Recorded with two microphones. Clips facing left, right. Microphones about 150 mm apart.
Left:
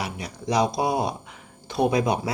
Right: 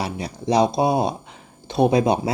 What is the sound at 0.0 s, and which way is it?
Speech, 30° right (ahead or behind).